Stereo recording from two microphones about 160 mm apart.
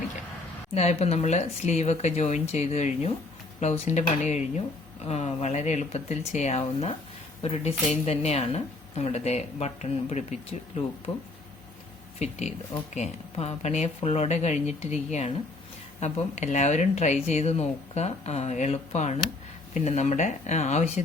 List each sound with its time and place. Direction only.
0.7 s speech: 40° left (ahead or behind)
12.2 s speech: 45° left (ahead or behind)